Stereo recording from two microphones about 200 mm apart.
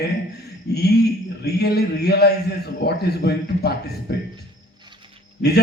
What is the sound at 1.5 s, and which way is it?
A man's voice, 55° left (ahead or behind).